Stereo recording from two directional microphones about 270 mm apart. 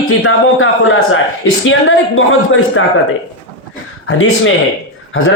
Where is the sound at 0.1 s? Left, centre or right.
Left.